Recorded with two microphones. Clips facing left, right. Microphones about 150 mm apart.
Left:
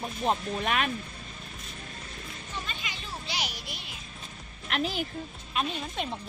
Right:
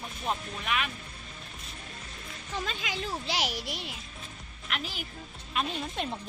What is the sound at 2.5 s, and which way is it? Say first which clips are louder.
Speech: right 6 dB; 90° right.